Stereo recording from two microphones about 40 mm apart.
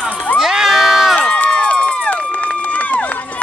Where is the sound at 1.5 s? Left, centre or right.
Left.